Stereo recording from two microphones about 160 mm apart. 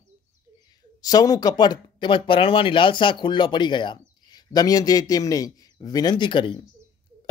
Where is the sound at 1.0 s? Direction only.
25° left (ahead or behind).